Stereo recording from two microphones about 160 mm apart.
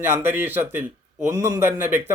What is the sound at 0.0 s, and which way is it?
Speech, 15° right (ahead or behind).